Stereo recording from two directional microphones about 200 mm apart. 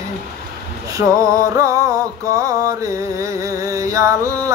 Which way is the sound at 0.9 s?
15° right (ahead or behind).